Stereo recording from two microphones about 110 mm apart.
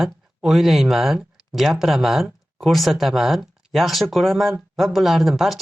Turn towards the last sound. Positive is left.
turn(degrees=0)  # may be behind; listen again after turning